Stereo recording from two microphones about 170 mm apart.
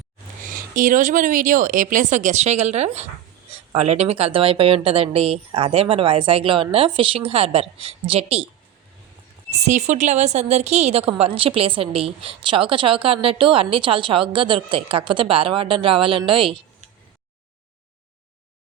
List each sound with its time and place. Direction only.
0.4 s a woman's voice: 55° right (ahead or behind); by 8.4 s 35° right (ahead or behind)
9.5 s a woman's voice: 40° right (ahead or behind)